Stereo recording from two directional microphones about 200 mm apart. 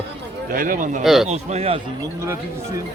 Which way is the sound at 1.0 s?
Centre (ahead or behind).